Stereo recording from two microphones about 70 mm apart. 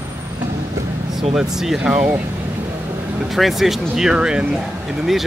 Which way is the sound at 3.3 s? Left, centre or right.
Centre.